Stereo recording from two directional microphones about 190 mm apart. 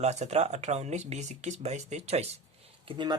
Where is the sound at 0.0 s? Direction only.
35° right (ahead or behind).